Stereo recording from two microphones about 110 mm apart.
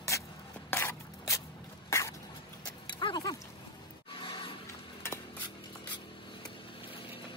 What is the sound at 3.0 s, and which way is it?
Dog, 40° left (ahead or behind).